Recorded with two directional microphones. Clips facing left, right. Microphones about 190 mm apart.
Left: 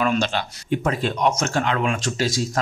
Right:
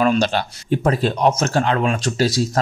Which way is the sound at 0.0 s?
40° right (ahead or behind).